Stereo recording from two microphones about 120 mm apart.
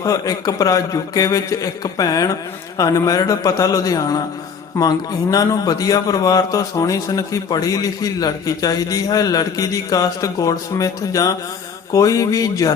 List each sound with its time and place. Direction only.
0.0 s a man's voice: 30° left (ahead or behind)